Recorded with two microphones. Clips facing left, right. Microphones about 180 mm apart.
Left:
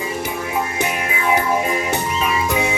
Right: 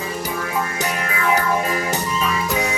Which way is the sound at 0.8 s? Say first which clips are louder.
Left 1 dB; 20° left (ahead or behind).